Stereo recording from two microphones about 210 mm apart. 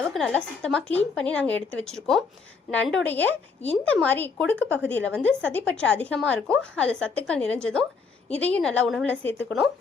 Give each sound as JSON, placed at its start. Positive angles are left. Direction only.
{"t": 0.1, "sound": "a woman's voice", "side_deg": 5}